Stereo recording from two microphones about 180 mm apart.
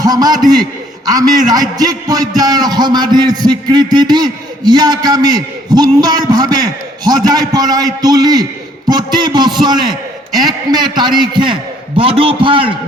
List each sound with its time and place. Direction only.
0.0 s a man's voice: 20° right (ahead or behind)